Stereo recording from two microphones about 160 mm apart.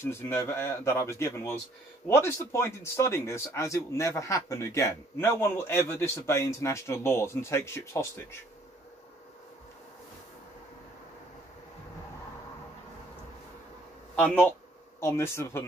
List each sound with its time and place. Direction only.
0.0 s speech: 15° left (ahead or behind)
14.1 s speech: 10° left (ahead or behind)